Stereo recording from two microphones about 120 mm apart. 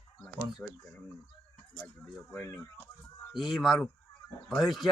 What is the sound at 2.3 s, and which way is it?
Speech, 10° left (ahead or behind).